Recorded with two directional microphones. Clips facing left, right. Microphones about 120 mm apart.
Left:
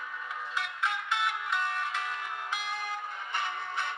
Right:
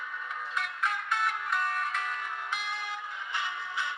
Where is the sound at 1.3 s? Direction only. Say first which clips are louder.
Right 1 dB; 25° left (ahead or behind).